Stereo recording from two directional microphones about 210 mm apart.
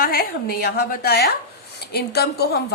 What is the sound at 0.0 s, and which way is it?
A woman's voice, 45° left (ahead or behind).